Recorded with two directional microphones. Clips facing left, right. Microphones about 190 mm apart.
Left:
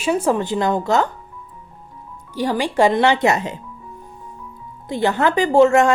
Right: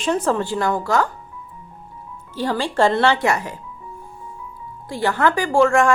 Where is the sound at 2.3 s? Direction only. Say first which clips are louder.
Left 2 dB; 15° left (ahead or behind).